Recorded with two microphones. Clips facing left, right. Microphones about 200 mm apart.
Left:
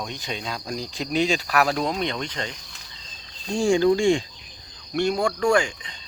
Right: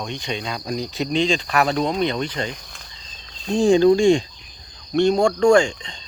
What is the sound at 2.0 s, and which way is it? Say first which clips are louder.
Speech: right 5 dB; 35° right (ahead or behind).